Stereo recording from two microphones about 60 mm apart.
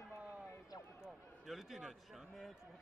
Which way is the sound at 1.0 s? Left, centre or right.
Centre.